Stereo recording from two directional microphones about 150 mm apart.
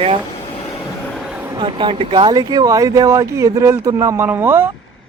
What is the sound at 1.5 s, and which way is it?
Speech, 35° right (ahead or behind).